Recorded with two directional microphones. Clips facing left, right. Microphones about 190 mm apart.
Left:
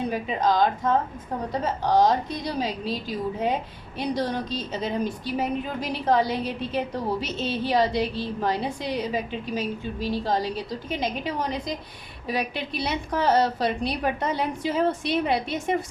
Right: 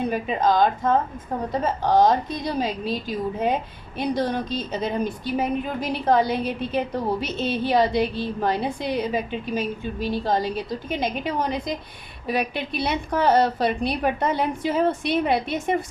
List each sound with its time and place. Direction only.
0.1 s a woman's voice: 55° right (ahead or behind)